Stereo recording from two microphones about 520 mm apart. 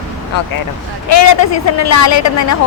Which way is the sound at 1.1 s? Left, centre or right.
Left.